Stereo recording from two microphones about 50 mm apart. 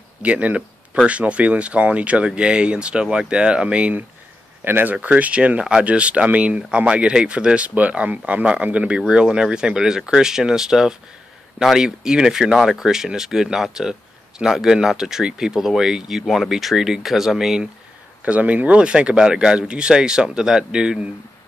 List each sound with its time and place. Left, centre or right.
0.2 s speech: right
4.6 s speech: right
5.0 s speech: right; by 17.6 s centre
18.2 s speech: right